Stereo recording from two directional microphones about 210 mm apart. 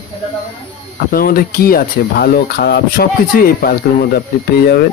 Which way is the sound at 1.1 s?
45° left (ahead or behind).